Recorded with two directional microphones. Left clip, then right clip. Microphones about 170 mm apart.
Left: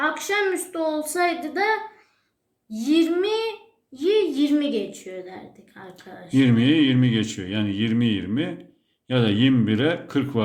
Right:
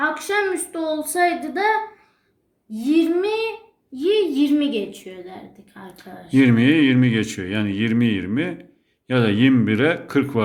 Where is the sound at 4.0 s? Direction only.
45° right (ahead or behind).